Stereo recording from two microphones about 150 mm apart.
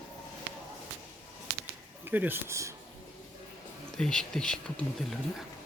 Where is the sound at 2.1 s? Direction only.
15° right (ahead or behind).